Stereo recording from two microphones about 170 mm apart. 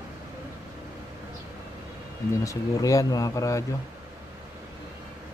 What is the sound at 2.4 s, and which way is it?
A man's voice, 20° left (ahead or behind).